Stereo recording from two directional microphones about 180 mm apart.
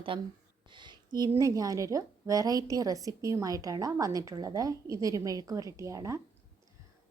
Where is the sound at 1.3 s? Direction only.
15° right (ahead or behind).